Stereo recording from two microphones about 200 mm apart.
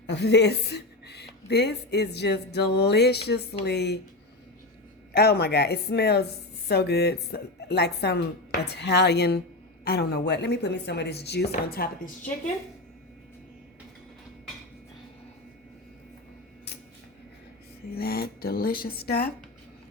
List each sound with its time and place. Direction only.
0.1 s speech: 60° left (ahead or behind)
5.1 s speech: 50° left (ahead or behind)
11.5 s speech: 45° left (ahead or behind)
17.9 s speech: 50° left (ahead or behind)